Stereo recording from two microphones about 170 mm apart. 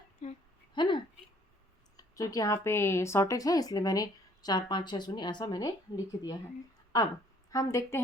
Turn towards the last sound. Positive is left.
turn(degrees=20)  # may be behind; listen again after turning